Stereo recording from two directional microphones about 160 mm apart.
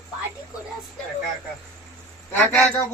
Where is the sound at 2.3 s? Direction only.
10° left (ahead or behind).